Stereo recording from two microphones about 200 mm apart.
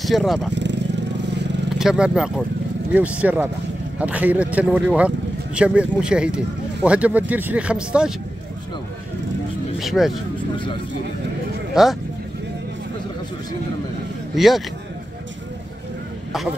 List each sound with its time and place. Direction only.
0.0 s speech: centre (ahead or behind)
0.5 s vehicle: 60° right (ahead or behind)
1.8 s speech: 5° right (ahead or behind)
9.8 s speech: centre (ahead or behind)
11.7 s speech: centre (ahead or behind)
14.3 s speech: centre (ahead or behind)